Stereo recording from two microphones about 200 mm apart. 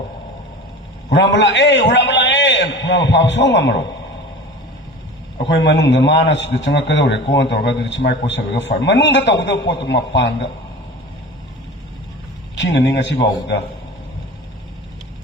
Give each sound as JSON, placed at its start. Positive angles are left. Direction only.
{"t": 1.1, "sound": "a man's voice", "side_deg": 60}
{"t": 5.5, "sound": "a man's voice", "side_deg": 60}
{"t": 12.5, "sound": "a man's voice", "side_deg": 60}